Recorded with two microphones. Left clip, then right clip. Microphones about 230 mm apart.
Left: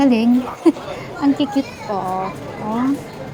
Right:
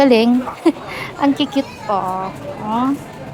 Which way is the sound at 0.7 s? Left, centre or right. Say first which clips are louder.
Left 1 dB; right.